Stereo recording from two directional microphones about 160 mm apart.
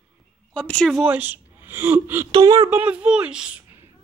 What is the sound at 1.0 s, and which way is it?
Speech, 10° right (ahead or behind).